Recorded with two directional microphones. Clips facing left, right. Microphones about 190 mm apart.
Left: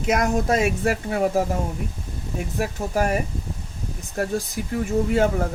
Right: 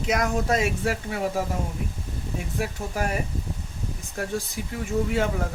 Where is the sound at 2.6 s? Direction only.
45° left (ahead or behind).